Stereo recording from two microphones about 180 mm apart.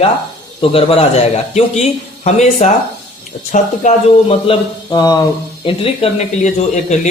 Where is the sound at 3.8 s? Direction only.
45° left (ahead or behind).